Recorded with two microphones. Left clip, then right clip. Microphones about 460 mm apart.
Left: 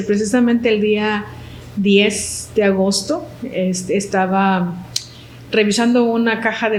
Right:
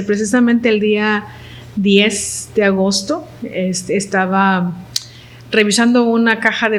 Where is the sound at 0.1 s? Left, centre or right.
Right.